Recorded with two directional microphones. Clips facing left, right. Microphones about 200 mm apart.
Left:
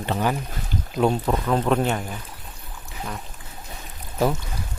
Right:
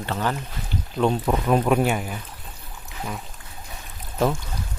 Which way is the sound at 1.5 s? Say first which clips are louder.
Right 2 dB; 10° right (ahead or behind).